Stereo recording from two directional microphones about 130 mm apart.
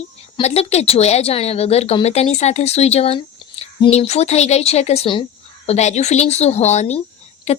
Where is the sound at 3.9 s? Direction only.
55° left (ahead or behind).